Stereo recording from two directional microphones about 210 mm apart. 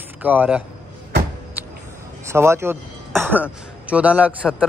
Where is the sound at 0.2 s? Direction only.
10° right (ahead or behind).